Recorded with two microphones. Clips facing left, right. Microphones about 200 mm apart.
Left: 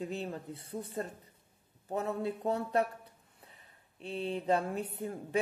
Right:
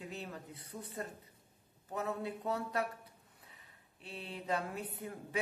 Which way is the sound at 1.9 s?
30° left (ahead or behind).